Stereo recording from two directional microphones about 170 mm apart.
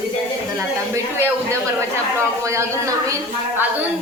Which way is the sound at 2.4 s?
15° right (ahead or behind).